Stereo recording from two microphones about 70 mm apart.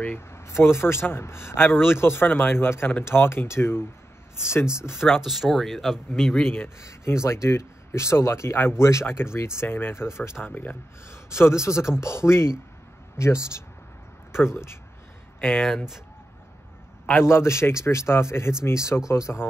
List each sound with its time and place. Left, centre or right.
0.0 s speech: left
5.2 s speech: centre
6.4 s speech: left
6.8 s speech: left
10.4 s speech: left
11.1 s speech: left
17.2 s speech: left